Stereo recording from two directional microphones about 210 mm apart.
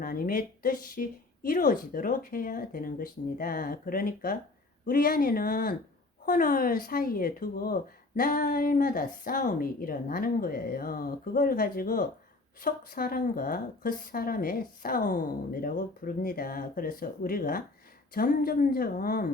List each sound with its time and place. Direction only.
0.0 s speech: 45° left (ahead or behind)